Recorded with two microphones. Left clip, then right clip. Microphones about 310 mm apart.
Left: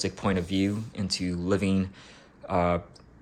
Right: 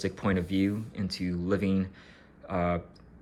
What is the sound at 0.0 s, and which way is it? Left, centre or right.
Speech, centre.